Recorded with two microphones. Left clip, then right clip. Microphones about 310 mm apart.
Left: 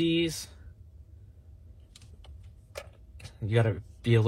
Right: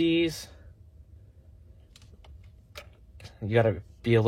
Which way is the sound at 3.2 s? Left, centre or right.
Right.